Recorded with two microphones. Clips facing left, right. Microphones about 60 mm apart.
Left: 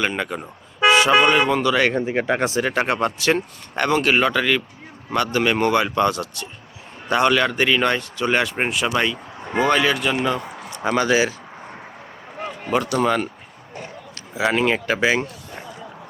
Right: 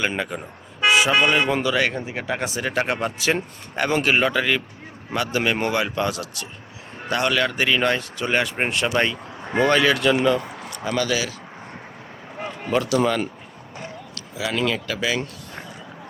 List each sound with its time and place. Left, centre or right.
0.9 s a sound: centre
1.2 s speech: centre
1.5 s a man's voice: centre
1.7 s speech: centre
2.1 s speech: left
2.6 s a man's voice: centre
10.8 s speech: left
12.4 s a sound: centre
12.7 s speech: centre
14.2 s speech: left